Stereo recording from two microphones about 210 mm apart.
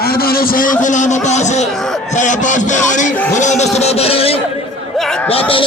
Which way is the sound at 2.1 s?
35° left (ahead or behind).